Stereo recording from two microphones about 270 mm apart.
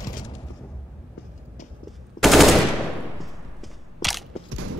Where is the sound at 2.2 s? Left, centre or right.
Centre.